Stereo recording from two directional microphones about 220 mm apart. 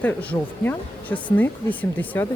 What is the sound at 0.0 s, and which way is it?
Speech, 5° left (ahead or behind).